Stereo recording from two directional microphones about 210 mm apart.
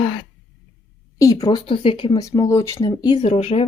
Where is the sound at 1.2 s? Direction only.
15° left (ahead or behind).